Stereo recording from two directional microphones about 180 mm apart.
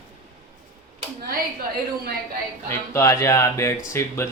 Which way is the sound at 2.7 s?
15° left (ahead or behind).